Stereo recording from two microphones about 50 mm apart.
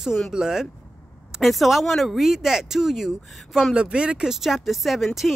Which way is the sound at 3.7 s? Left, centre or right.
Right.